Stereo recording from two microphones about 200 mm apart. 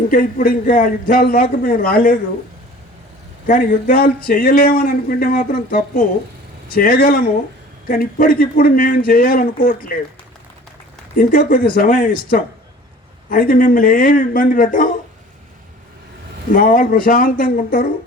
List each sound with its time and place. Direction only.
0.1 s speech: 45° left (ahead or behind)
3.4 s speech: 45° left (ahead or behind)
11.2 s speech: 50° left (ahead or behind)
13.3 s speech: 45° left (ahead or behind)
16.6 s speech: 45° left (ahead or behind)